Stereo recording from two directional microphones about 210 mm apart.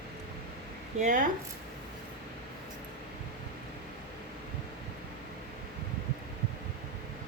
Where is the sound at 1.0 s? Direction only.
35° right (ahead or behind).